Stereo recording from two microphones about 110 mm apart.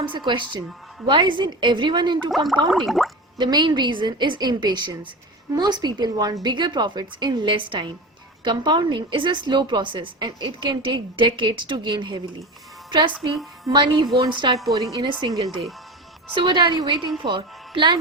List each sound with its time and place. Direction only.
0.0 s a woman's voice: 45° right (ahead or behind)
2.3 s speech: centre (ahead or behind)
3.3 s a woman's voice: 45° right (ahead or behind)